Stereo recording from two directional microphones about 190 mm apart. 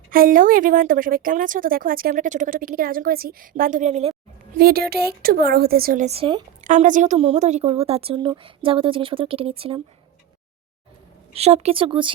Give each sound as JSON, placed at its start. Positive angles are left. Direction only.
{"t": 0.1, "sound": "a woman's voice", "side_deg": -45}
{"t": 4.5, "sound": "a woman's voice", "side_deg": -55}
{"t": 6.1, "sound": "a woman's voice", "side_deg": -30}
{"t": 6.7, "sound": "a woman's voice", "side_deg": -40}
{"t": 11.3, "sound": "a woman's voice", "side_deg": -35}